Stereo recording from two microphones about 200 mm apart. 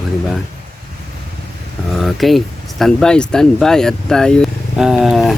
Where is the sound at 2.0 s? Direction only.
Centre (ahead or behind).